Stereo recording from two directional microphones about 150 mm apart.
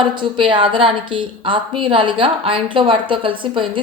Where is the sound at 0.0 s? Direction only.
30° right (ahead or behind).